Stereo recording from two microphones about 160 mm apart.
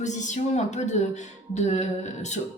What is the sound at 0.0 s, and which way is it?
A woman's voice, 50° left (ahead or behind).